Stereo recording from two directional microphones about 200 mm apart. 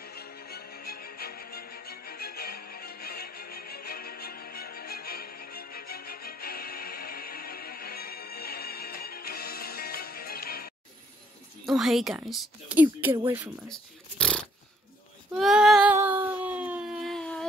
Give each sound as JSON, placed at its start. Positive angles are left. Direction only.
{"t": 0.0, "sound": "music", "side_deg": 50}
{"t": 11.6, "sound": "speech", "side_deg": 0}
{"t": 13.7, "sound": "a sound", "side_deg": 5}
{"t": 15.3, "sound": "child singing", "side_deg": 0}